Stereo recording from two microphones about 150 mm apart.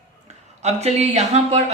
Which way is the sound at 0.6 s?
45° right (ahead or behind).